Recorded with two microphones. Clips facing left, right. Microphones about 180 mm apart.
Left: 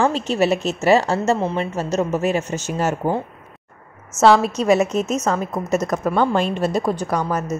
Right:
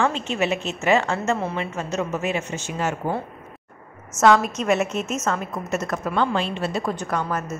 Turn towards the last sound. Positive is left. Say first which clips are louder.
# left 4 dB
turn(degrees=40)  # may be behind; listen again after turning